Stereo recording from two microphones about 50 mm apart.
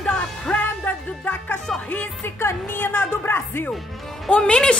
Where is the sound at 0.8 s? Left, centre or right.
Left.